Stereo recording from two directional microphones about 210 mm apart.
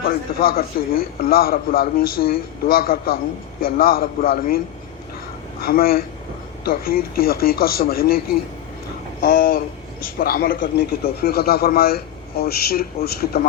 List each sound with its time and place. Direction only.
0.0 s a man's voice: 45° left (ahead or behind)
9.2 s a man's voice: 45° left (ahead or behind)